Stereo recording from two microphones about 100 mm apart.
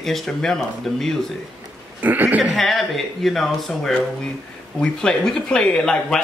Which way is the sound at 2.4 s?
Centre (ahead or behind).